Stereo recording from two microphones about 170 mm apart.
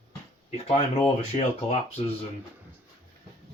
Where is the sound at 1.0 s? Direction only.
40° left (ahead or behind).